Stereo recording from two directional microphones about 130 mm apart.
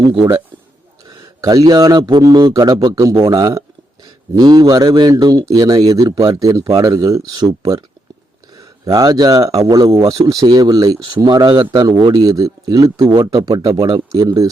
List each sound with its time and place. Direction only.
1.0 s a man's voice: 30° right (ahead or behind)